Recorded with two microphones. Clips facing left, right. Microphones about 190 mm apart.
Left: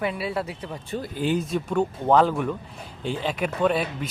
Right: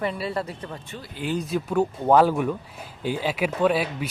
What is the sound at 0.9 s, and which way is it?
Speech, 40° left (ahead or behind).